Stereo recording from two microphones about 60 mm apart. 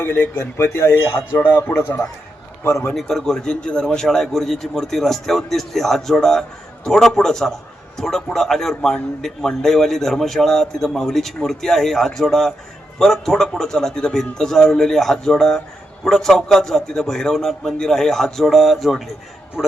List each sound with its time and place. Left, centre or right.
0.0 s speech: left
1.7 s speech: left
2.9 s a man's voice: centre